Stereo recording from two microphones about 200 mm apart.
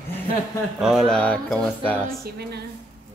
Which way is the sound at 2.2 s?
55° right (ahead or behind).